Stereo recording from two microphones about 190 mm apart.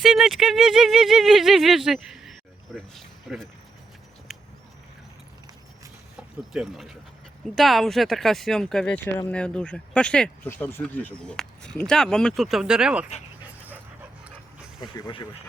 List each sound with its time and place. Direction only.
0.0 s speech: centre (ahead or behind)
4.3 s a sound: centre (ahead or behind)
6.5 s speech: 5° right (ahead or behind)
14.8 s speech: 20° left (ahead or behind)